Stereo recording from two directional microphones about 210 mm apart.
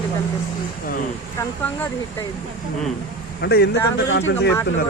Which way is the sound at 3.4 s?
50° left (ahead or behind).